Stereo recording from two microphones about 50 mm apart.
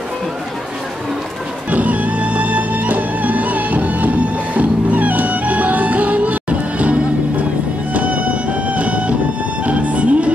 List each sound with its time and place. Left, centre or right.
1.7 s music: right